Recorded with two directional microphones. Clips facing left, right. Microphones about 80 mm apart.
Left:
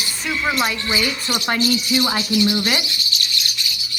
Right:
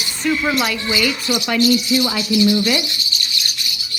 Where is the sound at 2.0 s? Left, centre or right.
Left.